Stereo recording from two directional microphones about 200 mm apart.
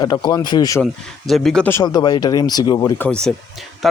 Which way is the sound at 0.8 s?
Centre (ahead or behind).